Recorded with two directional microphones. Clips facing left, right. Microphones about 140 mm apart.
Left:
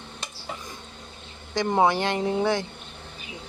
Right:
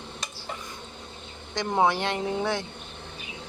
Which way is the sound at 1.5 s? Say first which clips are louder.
Left 2 dB; centre (ahead or behind).